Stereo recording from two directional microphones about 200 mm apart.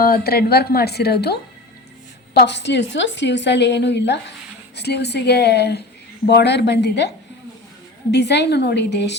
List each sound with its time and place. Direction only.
0.0 s a woman's voice: 50° left (ahead or behind)
2.5 s a woman's voice: 60° left (ahead or behind)
8.1 s a woman's voice: 60° left (ahead or behind)